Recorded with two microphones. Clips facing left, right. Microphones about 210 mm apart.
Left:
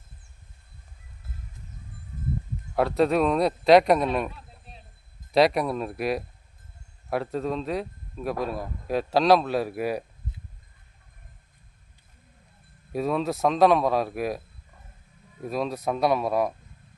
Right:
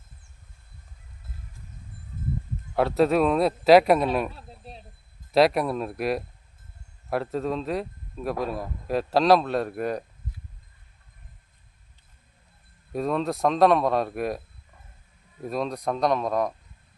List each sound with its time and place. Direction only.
2.7 s a man's voice: centre (ahead or behind)
4.3 s a sound: 35° right (ahead or behind)
5.3 s a man's voice: centre (ahead or behind)
12.9 s a man's voice: 5° left (ahead or behind)